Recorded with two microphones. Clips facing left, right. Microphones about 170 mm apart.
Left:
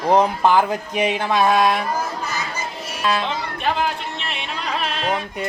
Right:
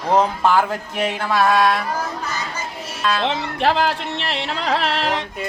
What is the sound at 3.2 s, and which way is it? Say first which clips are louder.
Music: right 4 dB; 85° right.